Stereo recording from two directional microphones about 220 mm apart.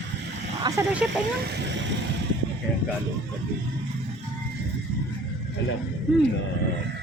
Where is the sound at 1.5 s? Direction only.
55° right (ahead or behind).